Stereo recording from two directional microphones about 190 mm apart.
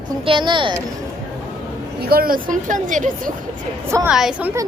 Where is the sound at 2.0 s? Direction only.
50° right (ahead or behind).